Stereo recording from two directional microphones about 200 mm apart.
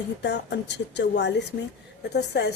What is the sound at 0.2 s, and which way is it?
A woman's voice, 60° left (ahead or behind).